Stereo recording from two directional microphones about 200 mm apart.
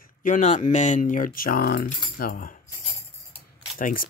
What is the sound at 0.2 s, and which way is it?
Speech, 40° left (ahead or behind).